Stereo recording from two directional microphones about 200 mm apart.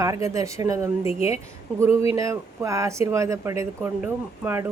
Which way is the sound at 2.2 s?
15° right (ahead or behind).